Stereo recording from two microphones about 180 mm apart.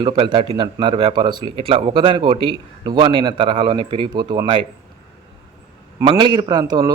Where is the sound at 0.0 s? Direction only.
30° right (ahead or behind).